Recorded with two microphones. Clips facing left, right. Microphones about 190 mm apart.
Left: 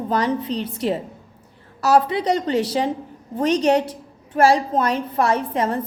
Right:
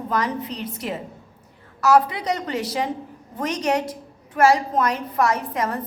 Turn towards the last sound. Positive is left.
turn(degrees=30)  # may be behind; listen again after turning